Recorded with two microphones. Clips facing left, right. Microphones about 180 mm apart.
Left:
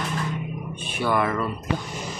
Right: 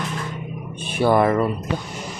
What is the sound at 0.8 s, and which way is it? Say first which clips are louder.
Speech: right 7 dB; 40° right (ahead or behind).